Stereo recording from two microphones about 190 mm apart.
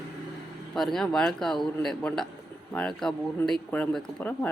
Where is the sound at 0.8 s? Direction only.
Centre (ahead or behind).